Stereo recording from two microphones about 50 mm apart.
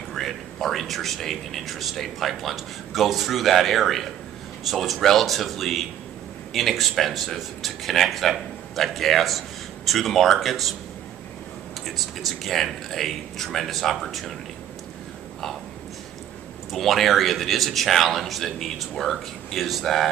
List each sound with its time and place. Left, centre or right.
0.1 s speech: centre
11.8 s speech: centre
16.7 s speech: centre